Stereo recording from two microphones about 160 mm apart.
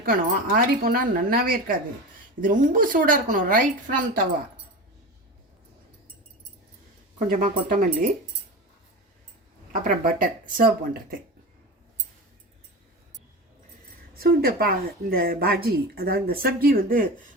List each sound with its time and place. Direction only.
0.0 s a woman's voice: 65° right (ahead or behind)
7.3 s a woman's voice: 55° right (ahead or behind)
9.7 s a woman's voice: 55° right (ahead or behind)
14.1 s speech: 70° right (ahead or behind)